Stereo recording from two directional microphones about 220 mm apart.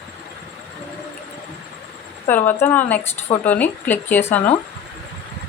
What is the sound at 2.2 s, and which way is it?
Speech, 10° left (ahead or behind).